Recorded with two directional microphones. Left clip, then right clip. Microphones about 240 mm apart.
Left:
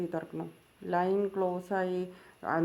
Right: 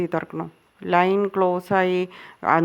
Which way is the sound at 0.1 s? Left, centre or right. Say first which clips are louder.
Right 10 dB; right.